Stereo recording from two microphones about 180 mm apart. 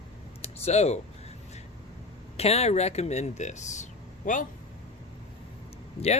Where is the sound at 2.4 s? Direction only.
35° left (ahead or behind).